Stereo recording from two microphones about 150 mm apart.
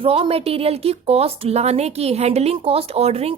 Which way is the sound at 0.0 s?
40° right (ahead or behind).